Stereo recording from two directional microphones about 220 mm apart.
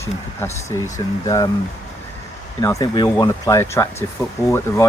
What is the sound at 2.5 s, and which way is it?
Speech, 15° left (ahead or behind).